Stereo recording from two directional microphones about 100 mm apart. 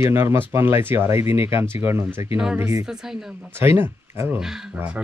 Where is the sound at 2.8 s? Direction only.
5° right (ahead or behind).